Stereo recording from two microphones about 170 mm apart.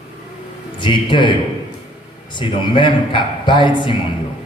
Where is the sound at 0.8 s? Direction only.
30° left (ahead or behind).